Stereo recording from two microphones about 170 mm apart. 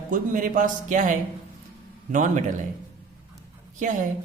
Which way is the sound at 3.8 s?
45° right (ahead or behind).